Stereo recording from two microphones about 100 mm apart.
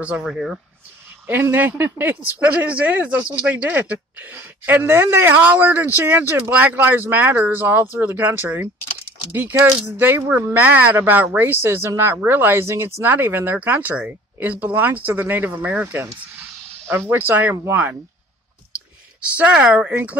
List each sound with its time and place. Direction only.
0.0 s speech: 10° right (ahead or behind)
1.2 s speech: 20° right (ahead or behind)
19.2 s speech: 15° right (ahead or behind)